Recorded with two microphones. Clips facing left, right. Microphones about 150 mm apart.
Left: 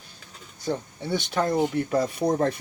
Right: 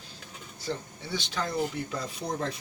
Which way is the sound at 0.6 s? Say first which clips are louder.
Left 6 dB; 55° left (ahead or behind).